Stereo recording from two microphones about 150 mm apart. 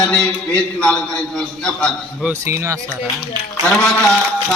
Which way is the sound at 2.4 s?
20° right (ahead or behind).